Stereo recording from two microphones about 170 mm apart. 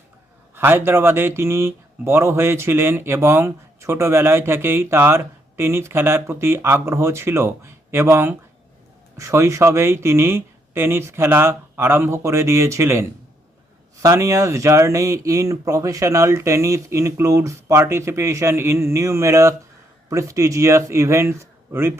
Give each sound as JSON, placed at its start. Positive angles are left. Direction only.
{"t": 0.5, "sound": "speech", "side_deg": -15}